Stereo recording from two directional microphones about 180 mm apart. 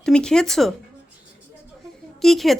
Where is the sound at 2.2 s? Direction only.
Centre (ahead or behind).